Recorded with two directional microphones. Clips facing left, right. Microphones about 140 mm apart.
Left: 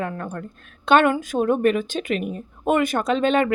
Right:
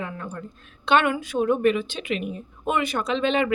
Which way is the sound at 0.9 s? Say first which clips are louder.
Left 4 dB; 45° left (ahead or behind).